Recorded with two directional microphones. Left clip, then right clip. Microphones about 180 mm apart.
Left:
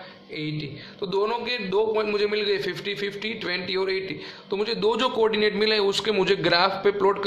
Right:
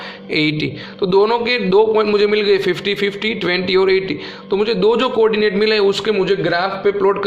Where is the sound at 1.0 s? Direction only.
25° right (ahead or behind); by 6.2 s centre (ahead or behind).